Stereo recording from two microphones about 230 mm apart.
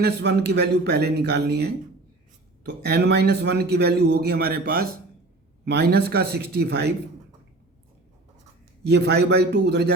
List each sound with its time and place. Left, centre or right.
0.0 s a man's voice: right
2.8 s a man's voice: right
8.8 s a man's voice: right